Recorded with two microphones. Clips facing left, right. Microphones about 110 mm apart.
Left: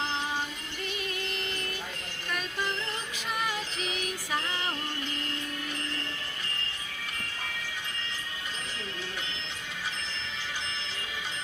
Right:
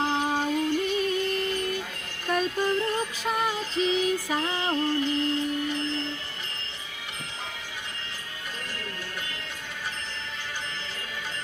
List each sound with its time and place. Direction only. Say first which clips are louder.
0.0 s music: right 6 dB; 45° right (ahead or behind)
2.2 s music: right 8 dB; 40° right (ahead or behind)